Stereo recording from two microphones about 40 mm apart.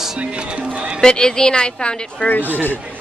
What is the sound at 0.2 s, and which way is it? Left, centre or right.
Music, right.